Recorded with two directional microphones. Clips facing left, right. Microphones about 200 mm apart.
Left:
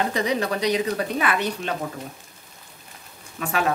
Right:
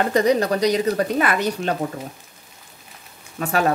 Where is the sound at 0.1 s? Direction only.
45° right (ahead or behind).